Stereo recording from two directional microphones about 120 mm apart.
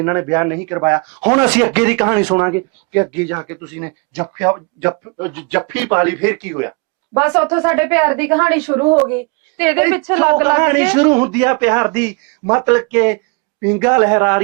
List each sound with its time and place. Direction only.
0.0 s speech: 25° right (ahead or behind)